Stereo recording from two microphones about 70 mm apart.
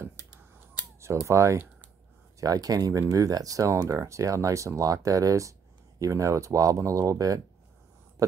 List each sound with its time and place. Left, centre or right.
1.2 s speech: right
2.4 s speech: right